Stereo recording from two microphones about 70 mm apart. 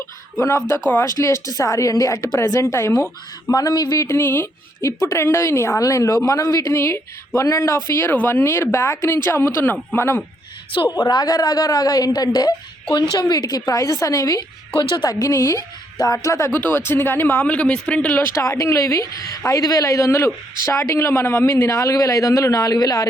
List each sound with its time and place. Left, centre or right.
0.3 s a man's voice: left
2.4 s speech: left
3.5 s speech: left
4.0 s speech: left
4.8 s a man's voice: left
8.1 s speech: left
10.9 s speech: left
12.9 s a woman's voice: left
14.8 s speech: left
15.1 s a man's voice: left
16.5 s speech: left
17.4 s speech: centre
18.2 s a man's voice: left